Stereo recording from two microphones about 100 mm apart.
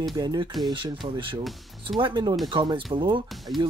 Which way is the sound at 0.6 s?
50° right (ahead or behind).